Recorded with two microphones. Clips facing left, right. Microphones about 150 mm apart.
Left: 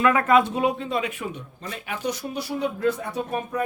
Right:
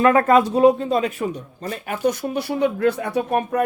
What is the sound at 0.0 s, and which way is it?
Speech, 40° right (ahead or behind).